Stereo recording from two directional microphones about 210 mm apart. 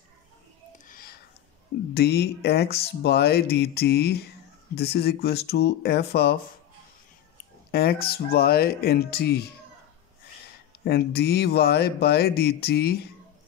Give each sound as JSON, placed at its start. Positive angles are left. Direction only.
{"t": 0.8, "sound": "a sound", "side_deg": 45}
{"t": 2.0, "sound": "speech", "side_deg": 50}
{"t": 7.7, "sound": "speech", "side_deg": 45}
{"t": 10.8, "sound": "speech", "side_deg": 50}